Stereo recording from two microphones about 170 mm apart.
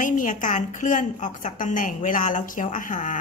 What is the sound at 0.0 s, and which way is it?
A woman's voice, 50° left (ahead or behind).